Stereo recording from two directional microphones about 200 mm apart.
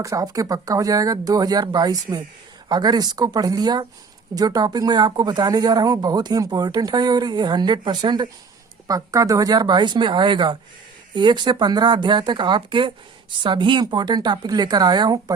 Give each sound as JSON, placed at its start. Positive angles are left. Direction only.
{"t": 0.0, "sound": "speech", "side_deg": -15}